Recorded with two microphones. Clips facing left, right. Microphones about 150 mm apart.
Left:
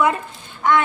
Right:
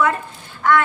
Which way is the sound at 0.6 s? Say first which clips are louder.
Right 1 dB; 20° left (ahead or behind).